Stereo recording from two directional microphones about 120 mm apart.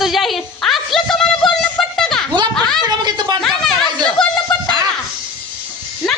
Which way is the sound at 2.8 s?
35° right (ahead or behind).